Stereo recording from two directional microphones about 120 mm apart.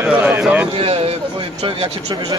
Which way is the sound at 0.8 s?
50° right (ahead or behind).